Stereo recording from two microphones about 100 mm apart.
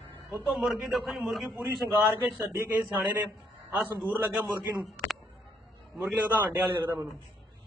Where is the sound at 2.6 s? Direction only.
20° right (ahead or behind).